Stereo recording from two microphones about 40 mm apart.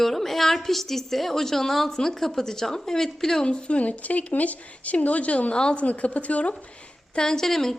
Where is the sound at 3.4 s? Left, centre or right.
Left.